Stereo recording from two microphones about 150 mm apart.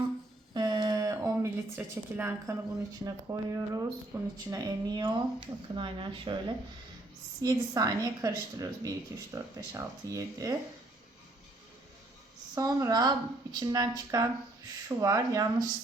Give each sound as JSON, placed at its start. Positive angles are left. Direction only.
{"t": 0.5, "sound": "a sound", "side_deg": -30}
{"t": 3.0, "sound": "speech", "side_deg": -20}
{"t": 7.4, "sound": "speech", "side_deg": -25}
{"t": 12.5, "sound": "speech", "side_deg": -25}